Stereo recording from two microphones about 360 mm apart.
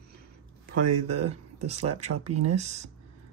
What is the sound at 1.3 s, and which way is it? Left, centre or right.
Speech, centre.